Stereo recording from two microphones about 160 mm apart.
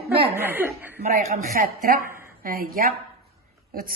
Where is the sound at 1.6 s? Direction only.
60° right (ahead or behind).